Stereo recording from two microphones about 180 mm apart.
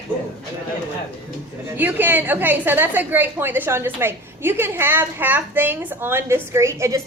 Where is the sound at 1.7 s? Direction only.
10° right (ahead or behind).